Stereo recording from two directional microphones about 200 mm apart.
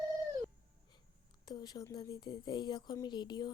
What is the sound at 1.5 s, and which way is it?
Speech, 20° left (ahead or behind).